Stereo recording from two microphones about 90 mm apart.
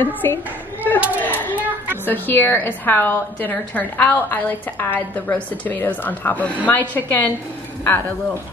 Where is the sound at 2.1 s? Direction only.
20° left (ahead or behind).